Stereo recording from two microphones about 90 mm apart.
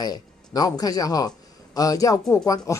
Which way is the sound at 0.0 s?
45° left (ahead or behind).